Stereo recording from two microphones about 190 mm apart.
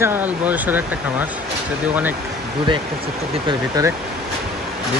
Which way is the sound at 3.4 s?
20° right (ahead or behind).